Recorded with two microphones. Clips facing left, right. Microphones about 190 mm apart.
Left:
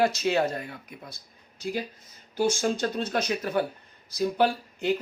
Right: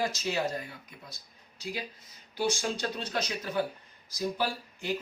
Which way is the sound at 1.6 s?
50° left (ahead or behind).